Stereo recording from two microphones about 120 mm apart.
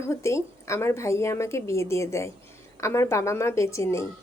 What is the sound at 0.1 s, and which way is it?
A woman's voice, 25° left (ahead or behind).